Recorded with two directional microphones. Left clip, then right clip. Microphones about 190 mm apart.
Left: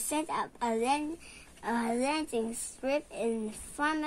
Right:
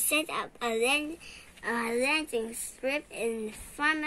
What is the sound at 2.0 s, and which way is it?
A woman's voice, 50° left (ahead or behind).